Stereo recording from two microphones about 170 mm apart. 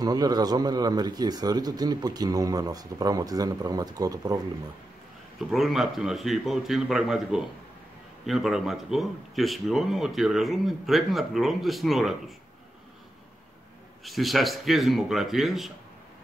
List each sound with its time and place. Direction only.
0.0 s a man's voice: 25° right (ahead or behind)
5.5 s speech: centre (ahead or behind)
14.0 s speech: centre (ahead or behind)